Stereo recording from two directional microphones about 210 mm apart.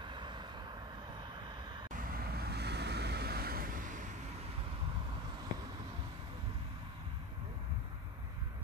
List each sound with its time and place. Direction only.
0.0 s vehicle: 20° right (ahead or behind)
1.9 s vehicle: 45° right (ahead or behind)